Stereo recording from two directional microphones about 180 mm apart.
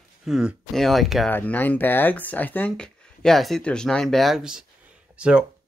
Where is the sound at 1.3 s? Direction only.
10° left (ahead or behind); by 5.4 s 5° right (ahead or behind).